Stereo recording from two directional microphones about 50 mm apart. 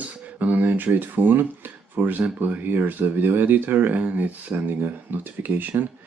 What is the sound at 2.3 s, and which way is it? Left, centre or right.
Speech, right.